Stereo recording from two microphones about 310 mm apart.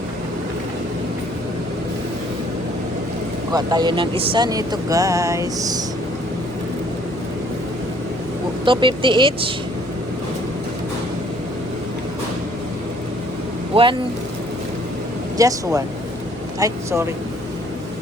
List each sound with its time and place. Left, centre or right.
3.5 s speech: centre
8.6 s speech: centre
13.7 s speech: centre
15.4 s speech: centre